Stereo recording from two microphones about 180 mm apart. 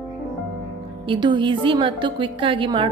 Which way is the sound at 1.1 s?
25° right (ahead or behind).